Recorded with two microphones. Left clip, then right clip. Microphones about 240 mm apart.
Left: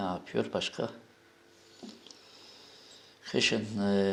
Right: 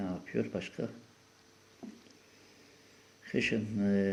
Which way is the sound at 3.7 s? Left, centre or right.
Left.